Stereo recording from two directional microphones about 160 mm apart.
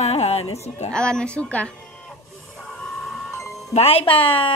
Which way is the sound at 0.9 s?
5° left (ahead or behind).